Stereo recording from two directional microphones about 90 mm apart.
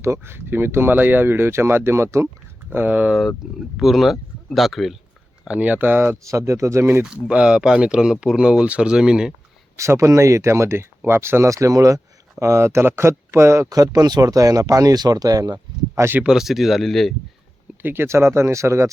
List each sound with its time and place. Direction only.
0.0 s speech: 30° right (ahead or behind)
2.2 s speech: 25° right (ahead or behind)
3.4 s speech: centre (ahead or behind)
5.5 s speech: 15° right (ahead or behind); by 6.8 s 35° right (ahead or behind)
7.0 s speech: 10° right (ahead or behind)
9.7 s speech: 35° right (ahead or behind)
13.7 s speech: 45° right (ahead or behind)
16.0 s speech: 25° right (ahead or behind)
16.2 s speech: 5° right (ahead or behind)
17.8 s speech: 25° right (ahead or behind)